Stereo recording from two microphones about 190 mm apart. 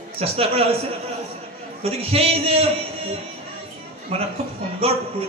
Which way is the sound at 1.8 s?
30° right (ahead or behind).